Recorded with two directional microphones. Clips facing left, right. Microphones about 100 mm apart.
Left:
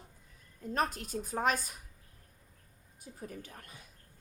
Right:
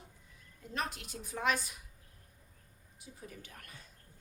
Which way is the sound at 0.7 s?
40° left (ahead or behind).